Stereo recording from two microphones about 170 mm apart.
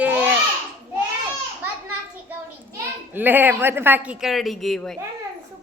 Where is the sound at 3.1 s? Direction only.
10° right (ahead or behind).